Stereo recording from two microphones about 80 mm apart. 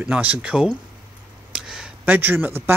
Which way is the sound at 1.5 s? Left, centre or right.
Centre.